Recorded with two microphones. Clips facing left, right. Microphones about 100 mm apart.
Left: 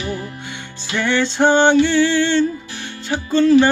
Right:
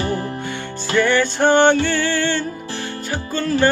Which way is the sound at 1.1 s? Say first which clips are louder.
Left 3 dB; 20° left (ahead or behind).